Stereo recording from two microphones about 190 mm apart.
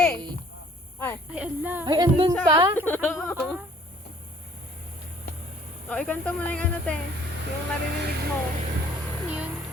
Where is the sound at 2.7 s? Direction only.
10° left (ahead or behind).